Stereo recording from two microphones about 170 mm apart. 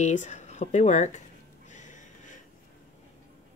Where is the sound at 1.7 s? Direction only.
45° left (ahead or behind).